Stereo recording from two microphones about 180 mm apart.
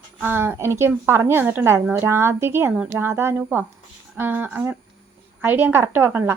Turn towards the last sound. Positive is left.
turn(degrees=-10)  # may be behind; listen again after turning